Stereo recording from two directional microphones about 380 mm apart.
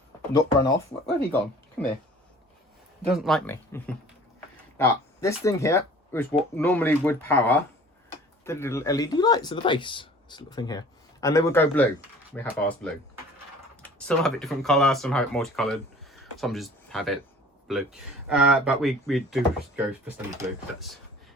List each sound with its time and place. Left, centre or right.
0.3 s speech: centre
1.8 s speech: centre
3.1 s speech: centre